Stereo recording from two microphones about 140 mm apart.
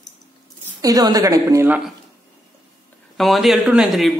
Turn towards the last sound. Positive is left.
turn(degrees=-5)  # may be behind; listen again after turning